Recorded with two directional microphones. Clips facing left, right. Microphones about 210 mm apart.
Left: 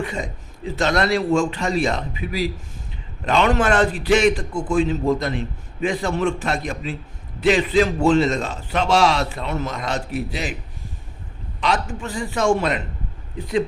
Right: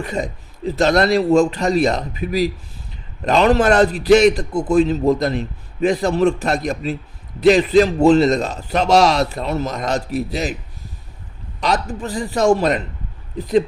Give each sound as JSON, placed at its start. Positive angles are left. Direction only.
{"t": 0.0, "sound": "a man's voice", "side_deg": -40}
{"t": 11.6, "sound": "a man's voice", "side_deg": -40}